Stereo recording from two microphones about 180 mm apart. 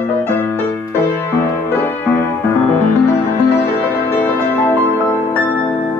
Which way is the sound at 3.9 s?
10° left (ahead or behind).